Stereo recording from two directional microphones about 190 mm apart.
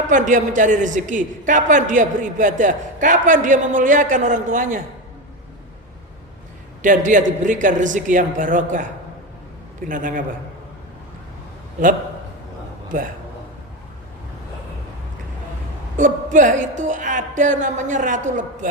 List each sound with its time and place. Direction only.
0.1 s a man's voice: 40° right (ahead or behind)
6.8 s a man's voice: 45° right (ahead or behind)
9.9 s a man's voice: 45° right (ahead or behind)
16.0 s a man's voice: 40° right (ahead or behind)